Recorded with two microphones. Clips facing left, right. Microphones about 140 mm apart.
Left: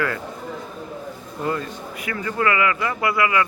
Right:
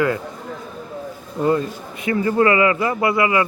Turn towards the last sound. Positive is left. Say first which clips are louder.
# right 3 dB
turn(degrees=-25)  # may be behind; listen again after turning